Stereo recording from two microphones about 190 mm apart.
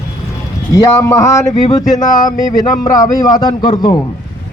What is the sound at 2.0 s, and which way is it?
Speech, 45° left (ahead or behind).